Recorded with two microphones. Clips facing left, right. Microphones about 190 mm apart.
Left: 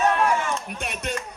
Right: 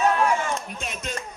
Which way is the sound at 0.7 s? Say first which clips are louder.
Left 2 dB; 65° left (ahead or behind).